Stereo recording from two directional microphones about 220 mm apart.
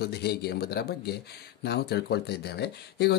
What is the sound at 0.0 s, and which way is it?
Speech, 45° left (ahead or behind).